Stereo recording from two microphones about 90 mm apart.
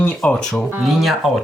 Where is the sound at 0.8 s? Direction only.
Centre (ahead or behind).